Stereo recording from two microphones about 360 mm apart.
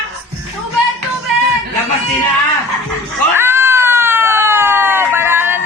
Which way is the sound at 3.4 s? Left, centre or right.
Centre.